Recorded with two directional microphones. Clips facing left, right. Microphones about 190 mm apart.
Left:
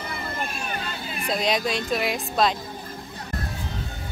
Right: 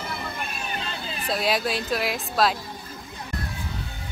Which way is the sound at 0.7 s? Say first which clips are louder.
Even; 30° right (ahead or behind).